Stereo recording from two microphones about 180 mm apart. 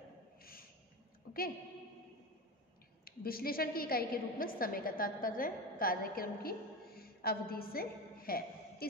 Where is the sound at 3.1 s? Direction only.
55° left (ahead or behind).